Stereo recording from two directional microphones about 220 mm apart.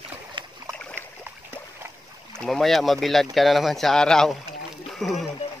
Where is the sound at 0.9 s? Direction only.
10° right (ahead or behind).